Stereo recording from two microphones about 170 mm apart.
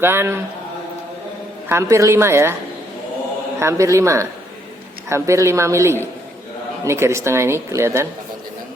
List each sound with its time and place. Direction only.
0.0 s speech: 15° right (ahead or behind)
1.7 s speech: 15° right (ahead or behind)
3.6 s speech: 15° right (ahead or behind)